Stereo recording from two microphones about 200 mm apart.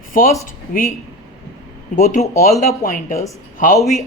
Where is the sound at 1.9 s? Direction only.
40° left (ahead or behind).